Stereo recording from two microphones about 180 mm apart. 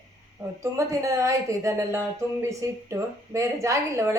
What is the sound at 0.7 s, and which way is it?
Speech, 15° right (ahead or behind).